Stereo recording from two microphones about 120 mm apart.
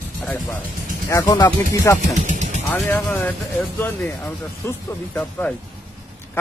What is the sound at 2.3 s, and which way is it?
Vehicle, 75° right (ahead or behind).